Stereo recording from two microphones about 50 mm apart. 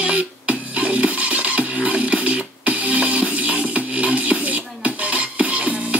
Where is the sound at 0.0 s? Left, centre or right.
Right.